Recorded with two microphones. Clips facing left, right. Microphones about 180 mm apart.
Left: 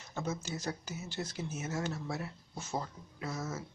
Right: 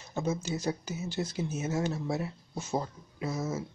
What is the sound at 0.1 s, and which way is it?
Speech, 15° right (ahead or behind).